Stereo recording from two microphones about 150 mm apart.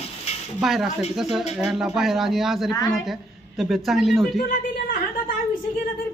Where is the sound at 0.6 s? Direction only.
Centre (ahead or behind).